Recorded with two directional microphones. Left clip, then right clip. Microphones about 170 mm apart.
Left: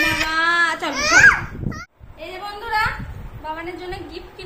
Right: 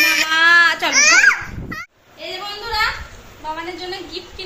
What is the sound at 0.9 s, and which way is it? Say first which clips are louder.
Babbling: even; 25° left (ahead or behind).